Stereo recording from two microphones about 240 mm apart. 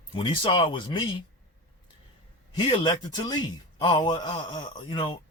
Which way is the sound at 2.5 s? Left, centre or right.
Centre.